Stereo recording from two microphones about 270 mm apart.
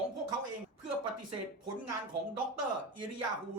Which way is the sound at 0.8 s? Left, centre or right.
Right.